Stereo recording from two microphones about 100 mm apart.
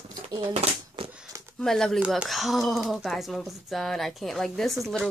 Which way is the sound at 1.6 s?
5° left (ahead or behind).